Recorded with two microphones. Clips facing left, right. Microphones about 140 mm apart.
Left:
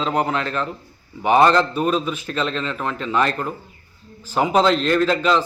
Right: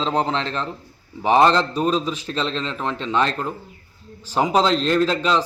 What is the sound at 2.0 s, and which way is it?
Speech, 30° right (ahead or behind).